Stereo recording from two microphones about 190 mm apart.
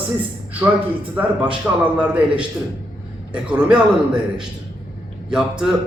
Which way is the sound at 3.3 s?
5° right (ahead or behind).